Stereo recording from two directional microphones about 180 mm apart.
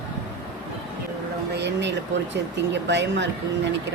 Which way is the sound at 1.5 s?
75° right (ahead or behind).